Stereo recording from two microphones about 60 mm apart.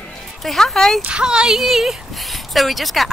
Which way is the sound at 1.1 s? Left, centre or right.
Centre.